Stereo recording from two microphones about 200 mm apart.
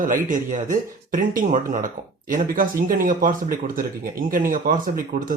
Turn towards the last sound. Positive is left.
turn(degrees=-45)  # may be behind; listen again after turning